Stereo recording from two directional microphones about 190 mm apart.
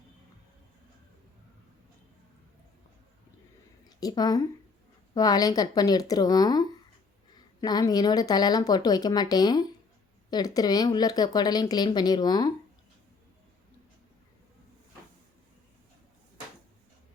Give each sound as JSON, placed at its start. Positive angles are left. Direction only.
{"t": 3.8, "sound": "a woman's voice", "side_deg": 20}